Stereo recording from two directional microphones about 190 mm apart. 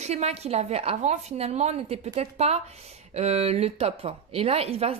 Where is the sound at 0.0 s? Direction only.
35° right (ahead or behind).